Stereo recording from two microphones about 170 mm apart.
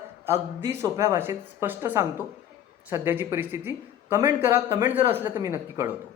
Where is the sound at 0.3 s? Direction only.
15° right (ahead or behind).